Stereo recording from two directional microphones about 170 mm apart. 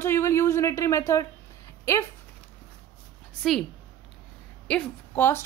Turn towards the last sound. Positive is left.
turn(degrees=10)  # may be behind; listen again after turning